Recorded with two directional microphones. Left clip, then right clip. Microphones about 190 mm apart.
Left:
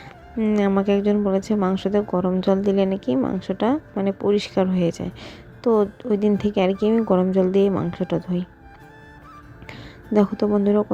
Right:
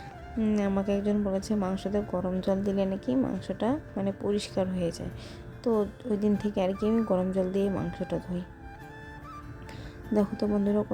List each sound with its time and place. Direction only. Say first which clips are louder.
0.5 s a woman's voice: left 10 dB; 25° left (ahead or behind)
9.6 s speech: left 6 dB; 20° left (ahead or behind)